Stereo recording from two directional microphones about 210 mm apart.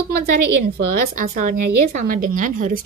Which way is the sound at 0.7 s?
40° right (ahead or behind).